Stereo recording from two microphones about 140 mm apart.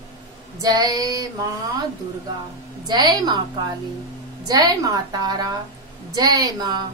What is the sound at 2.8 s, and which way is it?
Female singing, 30° right (ahead or behind).